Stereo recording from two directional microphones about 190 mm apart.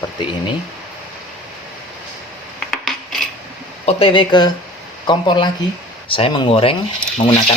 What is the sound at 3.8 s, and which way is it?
Speech, 30° left (ahead or behind).